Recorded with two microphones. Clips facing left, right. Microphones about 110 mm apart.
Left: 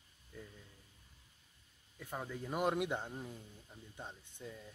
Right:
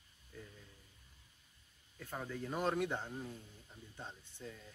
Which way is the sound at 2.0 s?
15° left (ahead or behind).